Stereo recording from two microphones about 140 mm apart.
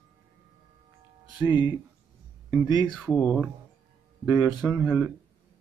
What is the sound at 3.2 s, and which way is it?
Speech, 5° right (ahead or behind).